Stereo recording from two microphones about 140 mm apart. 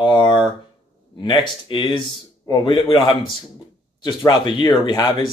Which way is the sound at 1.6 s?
35° left (ahead or behind).